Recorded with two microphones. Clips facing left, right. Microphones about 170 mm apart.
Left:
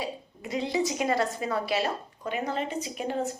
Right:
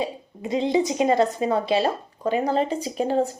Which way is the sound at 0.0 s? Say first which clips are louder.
Right 6 dB; 20° right (ahead or behind).